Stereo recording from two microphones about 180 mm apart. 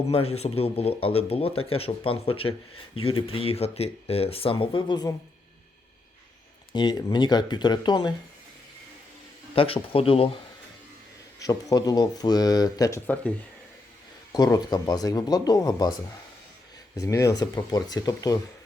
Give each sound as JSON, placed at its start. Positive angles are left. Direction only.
{"t": 0.1, "sound": "a man's voice", "side_deg": 35}
{"t": 6.7, "sound": "speech", "side_deg": 25}
{"t": 9.6, "sound": "a man's voice", "side_deg": 30}
{"t": 11.3, "sound": "speech", "side_deg": 20}
{"t": 14.3, "sound": "speech", "side_deg": 20}